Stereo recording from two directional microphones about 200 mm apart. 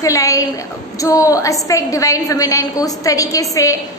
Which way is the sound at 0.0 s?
15° left (ahead or behind).